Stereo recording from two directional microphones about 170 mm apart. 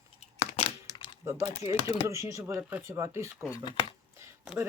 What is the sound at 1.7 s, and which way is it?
Speech, 35° left (ahead or behind).